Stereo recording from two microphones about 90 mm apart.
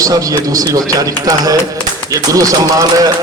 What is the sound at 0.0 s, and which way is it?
A man's voice, 40° right (ahead or behind).